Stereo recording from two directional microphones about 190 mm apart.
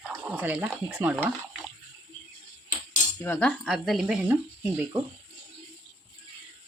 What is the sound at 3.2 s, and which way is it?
Speech, 10° left (ahead or behind).